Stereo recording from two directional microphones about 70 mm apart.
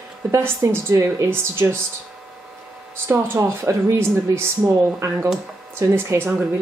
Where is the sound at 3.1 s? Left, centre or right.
Right.